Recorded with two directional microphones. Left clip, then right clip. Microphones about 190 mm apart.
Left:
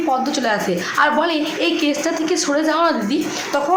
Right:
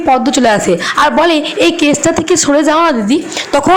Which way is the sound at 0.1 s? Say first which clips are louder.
Right 11 dB; 40° right (ahead or behind).